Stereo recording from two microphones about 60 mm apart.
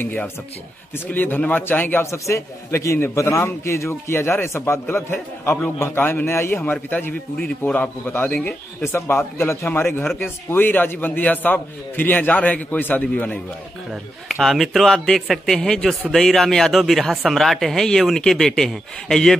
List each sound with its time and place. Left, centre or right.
0.9 s a man's voice: left
2.0 s a man's voice: left
6.6 s a man's voice: left
8.1 s a man's voice: left
14.3 s speech: centre